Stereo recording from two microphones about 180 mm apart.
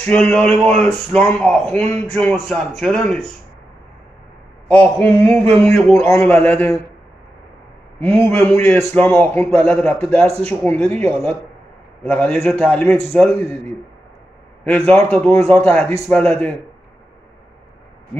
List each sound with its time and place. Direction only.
0.0 s a man's voice: 5° left (ahead or behind)
4.6 s a man's voice: 5° left (ahead or behind)
8.3 s a man's voice: 10° left (ahead or behind)
10.8 s speech: 35° right (ahead or behind)
12.0 s a man's voice: 5° left (ahead or behind)
14.9 s a man's voice: 5° left (ahead or behind)